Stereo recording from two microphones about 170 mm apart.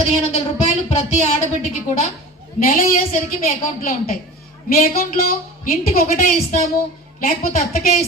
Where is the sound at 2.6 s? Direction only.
55° left (ahead or behind).